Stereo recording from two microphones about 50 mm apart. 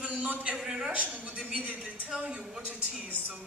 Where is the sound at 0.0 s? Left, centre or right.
Right.